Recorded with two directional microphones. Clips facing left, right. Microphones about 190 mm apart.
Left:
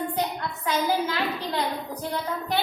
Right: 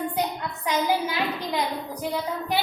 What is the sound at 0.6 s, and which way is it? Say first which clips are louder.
A woman's voice: right 1 dB; 15° right (ahead or behind).